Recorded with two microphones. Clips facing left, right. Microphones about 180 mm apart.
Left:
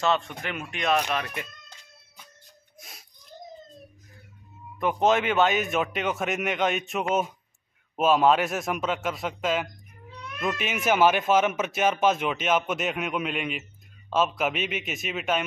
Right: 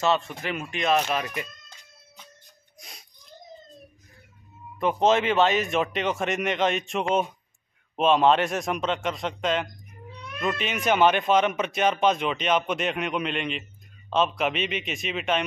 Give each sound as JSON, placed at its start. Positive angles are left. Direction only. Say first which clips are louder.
{"t": 0.0, "sound": "speech", "louder": "right 1 dB", "side_deg": -5}
{"t": 2.8, "sound": "a sound", "louder": "right 1 dB", "side_deg": 0}
{"t": 4.7, "sound": "speech", "louder": "right 1 dB", "side_deg": 0}